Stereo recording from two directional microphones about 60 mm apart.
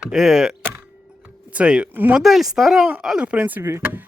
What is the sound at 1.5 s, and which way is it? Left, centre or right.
Speech, centre.